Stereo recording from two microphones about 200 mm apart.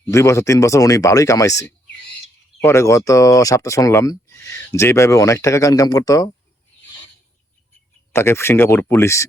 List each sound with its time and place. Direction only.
0.0 s speech: 15° left (ahead or behind)
8.1 s speech: 10° left (ahead or behind)